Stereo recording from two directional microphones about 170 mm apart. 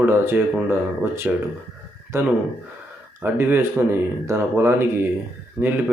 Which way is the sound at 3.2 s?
10° right (ahead or behind).